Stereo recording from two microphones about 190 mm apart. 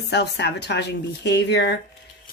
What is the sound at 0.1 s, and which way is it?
Speech, 65° left (ahead or behind).